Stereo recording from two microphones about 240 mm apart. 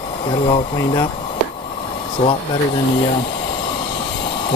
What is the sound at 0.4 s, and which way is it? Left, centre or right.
Speech, left.